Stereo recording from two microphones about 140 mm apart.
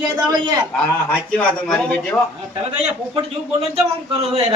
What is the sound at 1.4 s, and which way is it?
Speech, 5° left (ahead or behind).